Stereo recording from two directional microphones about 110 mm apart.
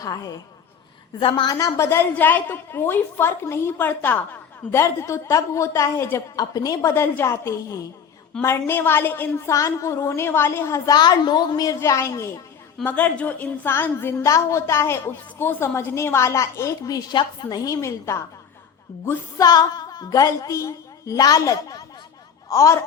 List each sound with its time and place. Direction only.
0.0 s a woman's voice: 35° left (ahead or behind)
1.5 s a woman's voice: 30° left (ahead or behind)
6.3 s a woman's voice: 35° left (ahead or behind)
6.9 s a woman's voice: 20° left (ahead or behind)
9.5 s a woman's voice: 30° left (ahead or behind)
10.9 s a woman's voice: 40° left (ahead or behind)
12.8 s a woman's voice: 15° left (ahead or behind)
19.4 s a woman's voice: 35° left (ahead or behind)